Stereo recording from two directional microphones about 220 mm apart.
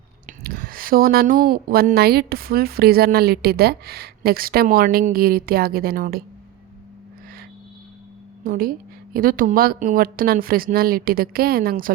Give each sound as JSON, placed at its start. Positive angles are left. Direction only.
{"t": 0.3, "sound": "a woman's voice", "side_deg": -40}
{"t": 8.4, "sound": "a woman's voice", "side_deg": -40}